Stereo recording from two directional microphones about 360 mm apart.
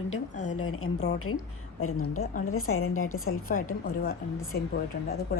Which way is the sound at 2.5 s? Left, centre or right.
Left.